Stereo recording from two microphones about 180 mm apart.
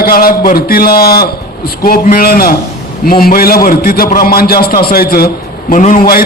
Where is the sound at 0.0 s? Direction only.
55° left (ahead or behind).